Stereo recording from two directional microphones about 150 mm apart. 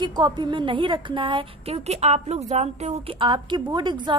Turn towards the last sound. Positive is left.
turn(degrees=-30)  # may be behind; listen again after turning